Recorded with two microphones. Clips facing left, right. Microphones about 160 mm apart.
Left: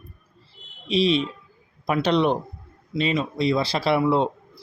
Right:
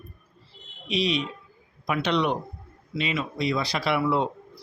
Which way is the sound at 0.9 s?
30° left (ahead or behind).